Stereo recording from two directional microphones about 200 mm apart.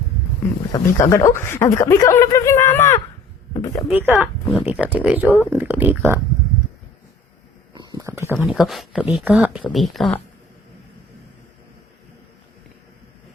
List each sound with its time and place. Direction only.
0.7 s speech: 20° left (ahead or behind)
3.8 s speech: 10° right (ahead or behind)
4.1 s speech: 10° left (ahead or behind)
4.6 s speech: 5° right (ahead or behind)
7.7 s speech: 20° right (ahead or behind); by 10.2 s centre (ahead or behind)